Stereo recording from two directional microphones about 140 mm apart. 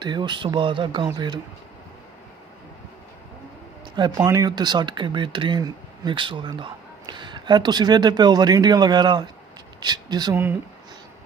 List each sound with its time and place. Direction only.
0.0 s speech: 30° right (ahead or behind)
3.9 s speech: 30° right (ahead or behind)
10.3 s speech: 15° right (ahead or behind)